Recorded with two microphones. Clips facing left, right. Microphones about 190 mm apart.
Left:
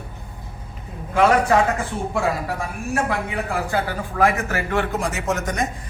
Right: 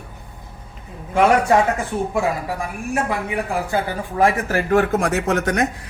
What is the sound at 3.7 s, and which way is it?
Speech, 25° right (ahead or behind).